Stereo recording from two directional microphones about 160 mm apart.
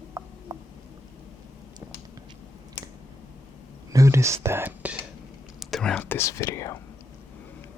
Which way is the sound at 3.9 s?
20° right (ahead or behind).